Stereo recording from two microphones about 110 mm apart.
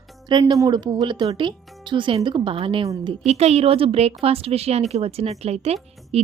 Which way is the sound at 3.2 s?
80° right.